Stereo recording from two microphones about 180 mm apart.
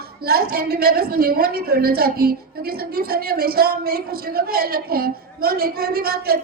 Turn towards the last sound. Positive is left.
turn(degrees=-55)  # may be behind; listen again after turning